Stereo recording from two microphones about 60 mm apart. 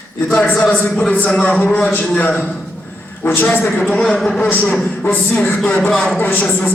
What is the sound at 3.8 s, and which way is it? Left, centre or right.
Speech, centre.